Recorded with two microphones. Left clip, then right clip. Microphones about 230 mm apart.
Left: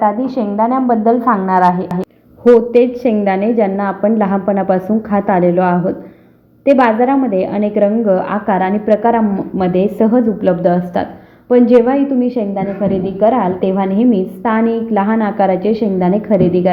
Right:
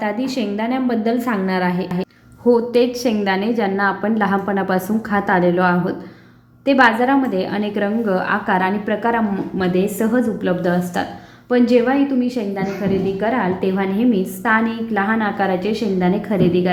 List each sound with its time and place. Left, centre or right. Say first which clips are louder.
0.5 s a woman's voice: left 11 dB; centre
1.8 s a woman's voice: left 4 dB; centre